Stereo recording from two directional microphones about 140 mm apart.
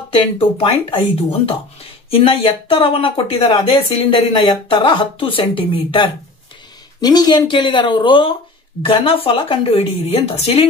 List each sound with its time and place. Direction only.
0.1 s speech: 40° left (ahead or behind)